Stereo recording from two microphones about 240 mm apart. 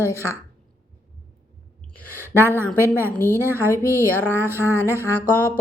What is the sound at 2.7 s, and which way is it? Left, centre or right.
A woman's voice, centre.